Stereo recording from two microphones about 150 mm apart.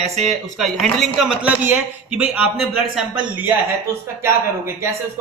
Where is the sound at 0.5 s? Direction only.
Centre (ahead or behind).